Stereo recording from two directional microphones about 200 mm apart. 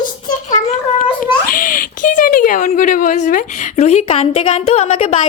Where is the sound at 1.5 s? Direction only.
45° left (ahead or behind).